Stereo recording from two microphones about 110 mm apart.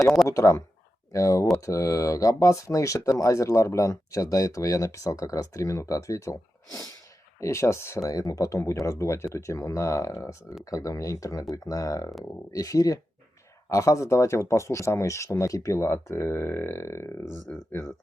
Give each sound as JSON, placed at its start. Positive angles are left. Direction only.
{"t": 0.3, "sound": "speech", "side_deg": 25}
{"t": 7.3, "sound": "speech", "side_deg": 25}
{"t": 17.4, "sound": "speech", "side_deg": 0}